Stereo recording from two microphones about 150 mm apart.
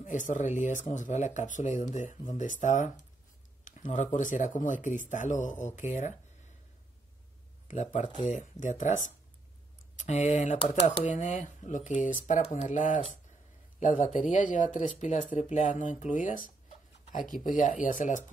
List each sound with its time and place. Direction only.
0.0 s speech: 60° left (ahead or behind)
7.6 s speech: 50° left (ahead or behind)